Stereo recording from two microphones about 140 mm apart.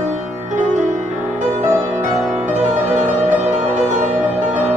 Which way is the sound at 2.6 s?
65° right (ahead or behind).